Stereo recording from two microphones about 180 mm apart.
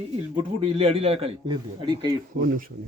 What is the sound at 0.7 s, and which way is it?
A man's voice, 30° right (ahead or behind).